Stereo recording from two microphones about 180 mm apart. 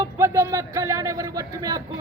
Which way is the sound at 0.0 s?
15° right (ahead or behind).